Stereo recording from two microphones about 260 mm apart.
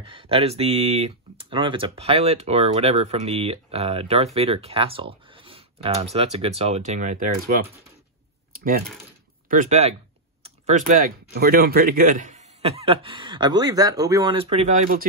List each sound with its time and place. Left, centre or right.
0.0 s speech: centre
9.5 s speech: right